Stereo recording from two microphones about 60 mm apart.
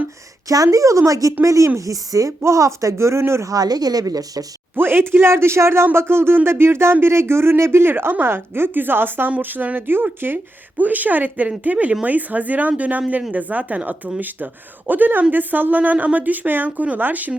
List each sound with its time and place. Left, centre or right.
0.4 s speech: right
2.4 s speech: right
3.5 s speech: right
4.7 s a woman's voice: right